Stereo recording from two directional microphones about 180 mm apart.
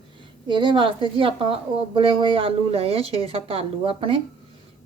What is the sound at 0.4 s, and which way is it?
A woman's voice, 25° right (ahead or behind).